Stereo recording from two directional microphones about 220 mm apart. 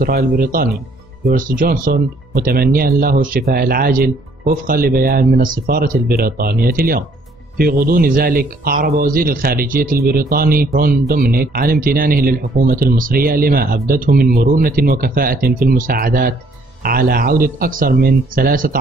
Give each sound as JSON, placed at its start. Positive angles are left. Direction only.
{"t": 0.0, "sound": "a man's voice", "side_deg": -40}